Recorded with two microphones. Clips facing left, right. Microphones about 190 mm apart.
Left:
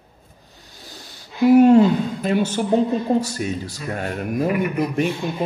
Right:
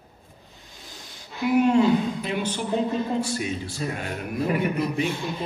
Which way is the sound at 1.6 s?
45° left (ahead or behind).